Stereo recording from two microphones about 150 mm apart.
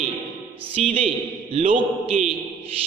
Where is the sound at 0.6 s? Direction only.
40° right (ahead or behind).